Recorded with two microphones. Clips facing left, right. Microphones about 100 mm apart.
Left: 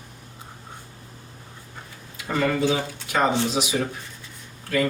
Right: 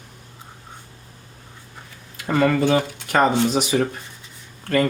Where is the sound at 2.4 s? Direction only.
55° right (ahead or behind).